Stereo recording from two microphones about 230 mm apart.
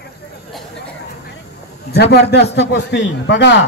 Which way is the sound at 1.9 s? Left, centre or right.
Left.